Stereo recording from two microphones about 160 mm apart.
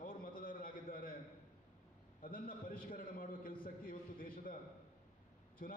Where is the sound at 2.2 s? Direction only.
60° left (ahead or behind).